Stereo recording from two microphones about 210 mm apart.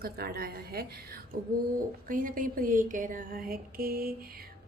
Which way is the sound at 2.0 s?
40° right (ahead or behind).